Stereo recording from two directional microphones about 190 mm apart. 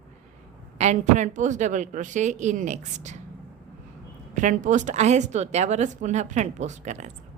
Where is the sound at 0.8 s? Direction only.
40° right (ahead or behind).